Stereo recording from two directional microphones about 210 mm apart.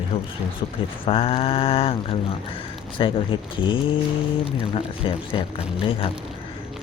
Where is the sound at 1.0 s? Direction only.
25° left (ahead or behind).